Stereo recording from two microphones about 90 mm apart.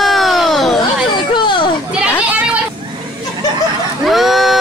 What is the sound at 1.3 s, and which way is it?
Children playing, 60° left (ahead or behind).